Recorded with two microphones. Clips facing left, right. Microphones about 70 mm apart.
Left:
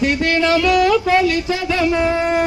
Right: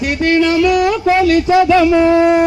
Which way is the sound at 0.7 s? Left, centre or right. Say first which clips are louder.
Even; right.